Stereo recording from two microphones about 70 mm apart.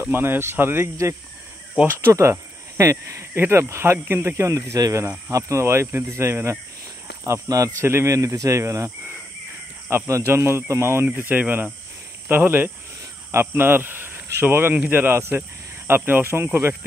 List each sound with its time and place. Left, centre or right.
0.0 s speech: right
2.0 s speech: right
3.3 s speech: right
4.6 s speech: right
5.3 s speech: right
7.4 s speech: right
11.1 s speech: right